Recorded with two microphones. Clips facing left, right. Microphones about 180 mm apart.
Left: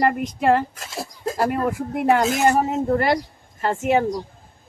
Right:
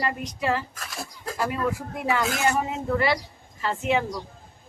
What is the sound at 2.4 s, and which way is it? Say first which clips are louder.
Speech: left 6 dB; 40° left (ahead or behind).